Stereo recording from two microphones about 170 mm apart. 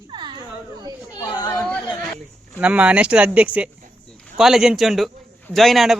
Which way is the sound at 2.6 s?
5° right (ahead or behind).